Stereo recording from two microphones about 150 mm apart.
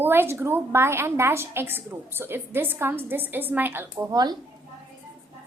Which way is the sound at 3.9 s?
25° right (ahead or behind).